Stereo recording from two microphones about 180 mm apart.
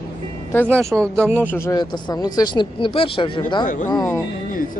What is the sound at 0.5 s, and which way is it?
Speech, 10° left (ahead or behind).